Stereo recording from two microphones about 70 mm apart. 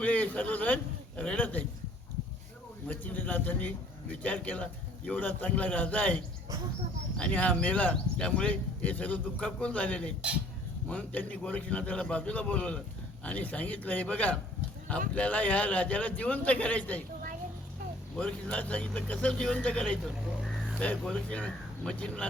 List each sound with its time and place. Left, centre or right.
0.0 s a man's voice: left
2.8 s speech: left
7.2 s speech: centre
10.2 s speech: centre
10.8 s a man's voice: centre
18.2 s a man's voice: centre